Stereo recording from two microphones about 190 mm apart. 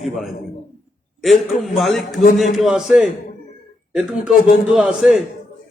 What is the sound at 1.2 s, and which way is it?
A man's voice, centre (ahead or behind).